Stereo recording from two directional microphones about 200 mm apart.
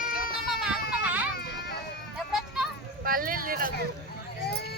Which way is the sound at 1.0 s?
10° right (ahead or behind).